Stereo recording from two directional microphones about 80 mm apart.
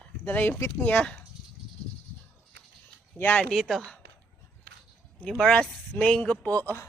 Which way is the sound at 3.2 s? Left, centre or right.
Left.